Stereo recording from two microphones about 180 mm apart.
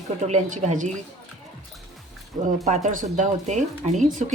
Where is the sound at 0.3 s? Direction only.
40° right (ahead or behind).